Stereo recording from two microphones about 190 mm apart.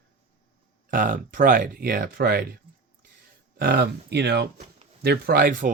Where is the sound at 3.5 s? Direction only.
50° right (ahead or behind).